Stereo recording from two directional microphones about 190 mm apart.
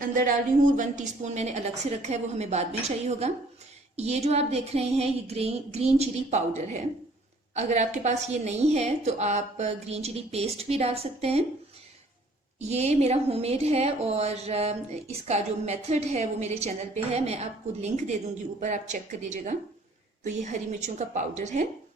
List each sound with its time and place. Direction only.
0.0 s a woman's voice: 45° right (ahead or behind)
12.6 s a woman's voice: 35° right (ahead or behind)